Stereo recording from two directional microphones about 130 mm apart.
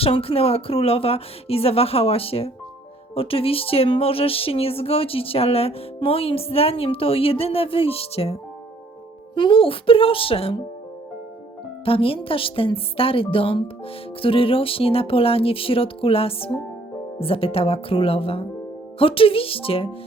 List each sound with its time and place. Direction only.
0.0 s speech: 45° left (ahead or behind)
11.9 s speech: 45° left (ahead or behind)